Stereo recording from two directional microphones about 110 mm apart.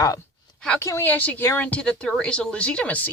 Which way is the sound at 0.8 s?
25° left (ahead or behind).